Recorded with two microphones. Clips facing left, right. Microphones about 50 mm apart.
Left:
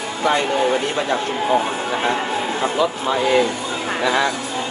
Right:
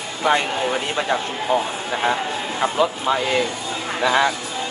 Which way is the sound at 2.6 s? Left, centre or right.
Centre.